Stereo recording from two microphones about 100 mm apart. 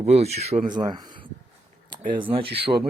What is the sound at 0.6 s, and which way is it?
Speech, 45° right (ahead or behind).